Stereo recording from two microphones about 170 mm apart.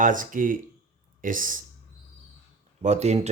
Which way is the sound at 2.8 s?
40° right (ahead or behind).